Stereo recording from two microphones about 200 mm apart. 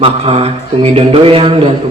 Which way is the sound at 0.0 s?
30° right (ahead or behind).